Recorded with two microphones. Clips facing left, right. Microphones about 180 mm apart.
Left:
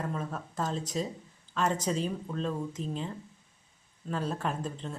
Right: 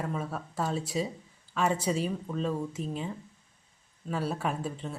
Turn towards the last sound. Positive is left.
turn(degrees=-5)  # may be behind; listen again after turning